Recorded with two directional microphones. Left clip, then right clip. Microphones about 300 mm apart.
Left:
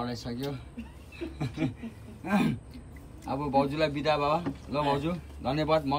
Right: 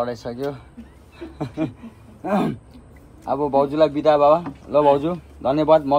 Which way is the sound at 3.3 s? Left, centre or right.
Centre.